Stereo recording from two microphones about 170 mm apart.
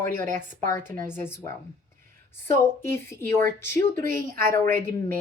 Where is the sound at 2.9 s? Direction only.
15° left (ahead or behind).